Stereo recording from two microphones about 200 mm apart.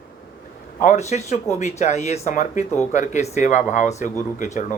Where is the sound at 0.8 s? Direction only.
35° left (ahead or behind).